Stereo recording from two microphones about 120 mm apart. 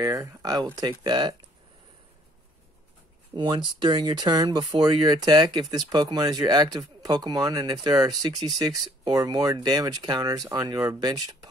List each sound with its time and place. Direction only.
0.0 s speech: 30° right (ahead or behind)
3.3 s speech: 40° right (ahead or behind)